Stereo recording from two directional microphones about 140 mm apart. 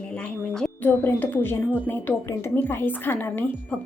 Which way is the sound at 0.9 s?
15° left (ahead or behind).